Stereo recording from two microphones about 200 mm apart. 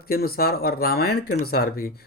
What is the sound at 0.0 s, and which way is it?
Speech, 50° left (ahead or behind).